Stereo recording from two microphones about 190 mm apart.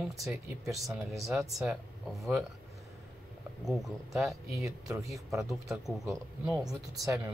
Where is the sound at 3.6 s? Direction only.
Centre (ahead or behind).